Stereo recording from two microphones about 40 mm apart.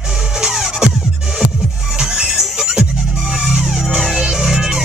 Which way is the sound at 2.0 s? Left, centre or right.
Centre.